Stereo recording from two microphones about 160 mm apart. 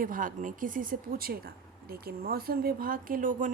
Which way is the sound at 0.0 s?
55° right (ahead or behind).